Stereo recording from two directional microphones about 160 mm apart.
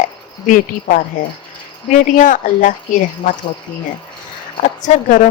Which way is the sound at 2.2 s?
55° left (ahead or behind).